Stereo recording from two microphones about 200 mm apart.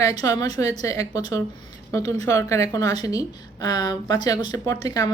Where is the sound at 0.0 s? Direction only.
15° left (ahead or behind).